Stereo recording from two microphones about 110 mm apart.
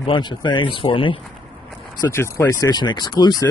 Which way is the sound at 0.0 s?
45° left (ahead or behind).